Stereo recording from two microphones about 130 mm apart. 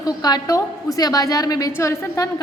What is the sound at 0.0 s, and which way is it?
A woman's voice, 30° left (ahead or behind).